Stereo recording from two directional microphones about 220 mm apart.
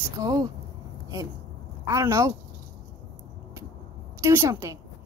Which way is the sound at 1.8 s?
15° right (ahead or behind).